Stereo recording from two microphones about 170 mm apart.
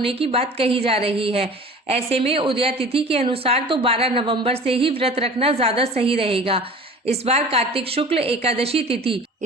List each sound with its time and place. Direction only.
0.0 s a woman's voice: 35° right (ahead or behind)